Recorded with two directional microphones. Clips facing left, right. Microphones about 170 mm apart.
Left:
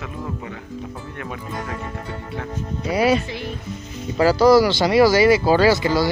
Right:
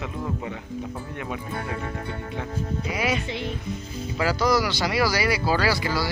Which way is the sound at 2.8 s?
35° left (ahead or behind).